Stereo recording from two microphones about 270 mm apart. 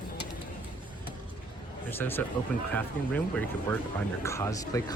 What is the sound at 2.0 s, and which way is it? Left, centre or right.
Speech, centre.